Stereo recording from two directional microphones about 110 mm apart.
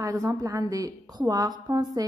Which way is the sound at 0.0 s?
30° right (ahead or behind).